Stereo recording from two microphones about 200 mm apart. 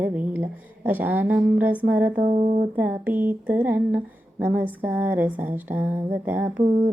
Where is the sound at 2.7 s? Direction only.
10° right (ahead or behind).